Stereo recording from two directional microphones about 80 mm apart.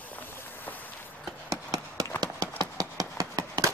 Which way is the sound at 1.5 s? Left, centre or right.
Right.